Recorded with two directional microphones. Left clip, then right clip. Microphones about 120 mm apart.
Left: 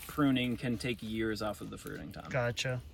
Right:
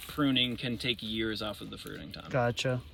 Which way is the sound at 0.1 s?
10° left (ahead or behind).